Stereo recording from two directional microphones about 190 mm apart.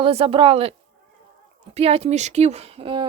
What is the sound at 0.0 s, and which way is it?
Speech, 30° right (ahead or behind).